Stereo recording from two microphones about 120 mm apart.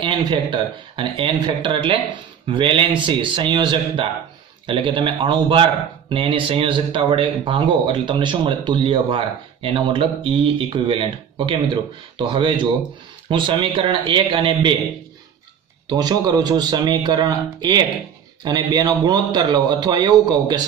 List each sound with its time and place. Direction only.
0.0 s a man's voice: 40° right (ahead or behind)
15.9 s a man's voice: 35° right (ahead or behind)